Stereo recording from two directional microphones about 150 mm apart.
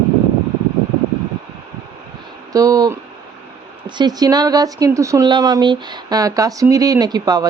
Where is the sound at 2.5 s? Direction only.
25° right (ahead or behind).